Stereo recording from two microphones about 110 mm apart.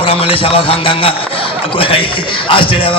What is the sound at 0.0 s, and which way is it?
A man's voice, 60° left (ahead or behind).